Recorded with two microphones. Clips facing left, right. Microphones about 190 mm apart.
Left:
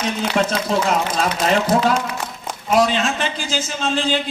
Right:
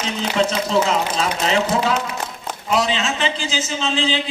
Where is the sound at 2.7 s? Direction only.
50° left (ahead or behind).